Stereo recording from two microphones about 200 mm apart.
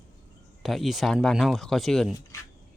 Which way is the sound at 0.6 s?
Centre (ahead or behind).